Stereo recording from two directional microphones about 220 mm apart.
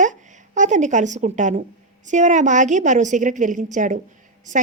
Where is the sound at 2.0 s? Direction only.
35° right (ahead or behind).